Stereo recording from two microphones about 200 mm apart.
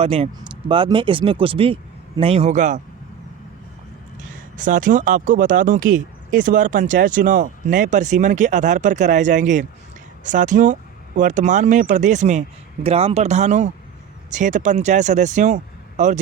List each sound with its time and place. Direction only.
0.0 s speech: 30° right (ahead or behind)
4.2 s speech: 40° right (ahead or behind)